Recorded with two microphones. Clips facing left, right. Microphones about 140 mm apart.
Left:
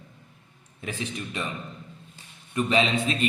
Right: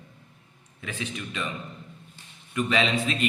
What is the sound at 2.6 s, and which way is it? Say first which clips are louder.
Speech: left 1 dB; 30° left (ahead or behind).